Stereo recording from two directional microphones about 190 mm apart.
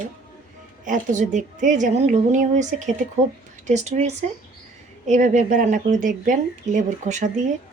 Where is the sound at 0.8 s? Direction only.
45° right (ahead or behind).